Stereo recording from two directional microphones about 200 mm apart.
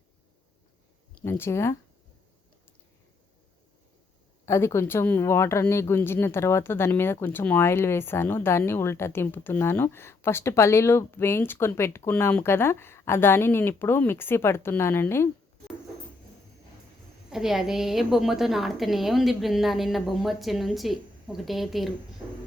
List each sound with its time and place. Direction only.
1.1 s speech: 10° left (ahead or behind)
4.4 s speech: 15° left (ahead or behind)
17.2 s a woman's voice: centre (ahead or behind)